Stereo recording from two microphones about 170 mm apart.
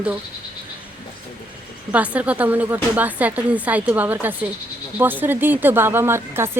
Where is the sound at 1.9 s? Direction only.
10° right (ahead or behind).